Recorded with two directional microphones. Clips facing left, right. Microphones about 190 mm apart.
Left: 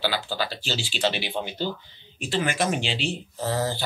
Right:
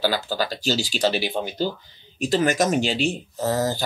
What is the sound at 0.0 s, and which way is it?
Speech, 40° right (ahead or behind).